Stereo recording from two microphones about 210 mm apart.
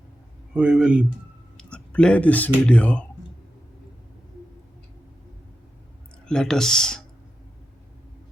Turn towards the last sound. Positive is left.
turn(degrees=5)  # may be behind; listen again after turning